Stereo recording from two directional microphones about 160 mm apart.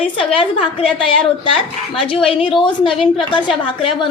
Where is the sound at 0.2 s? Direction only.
35° left (ahead or behind).